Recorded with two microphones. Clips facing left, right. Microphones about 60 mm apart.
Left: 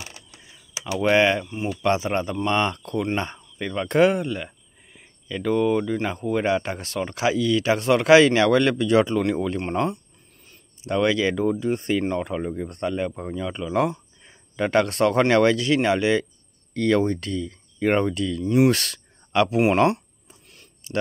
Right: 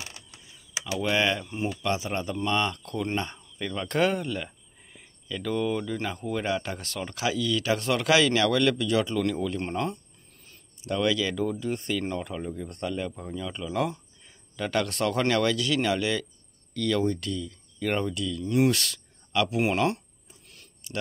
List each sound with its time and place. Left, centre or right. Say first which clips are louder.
0.9 s speech: left 7 dB; left
10.8 s speech: left 5 dB; left
20.4 s a sound: right 1 dB; left